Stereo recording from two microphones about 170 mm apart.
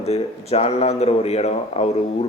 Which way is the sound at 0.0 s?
35° left (ahead or behind).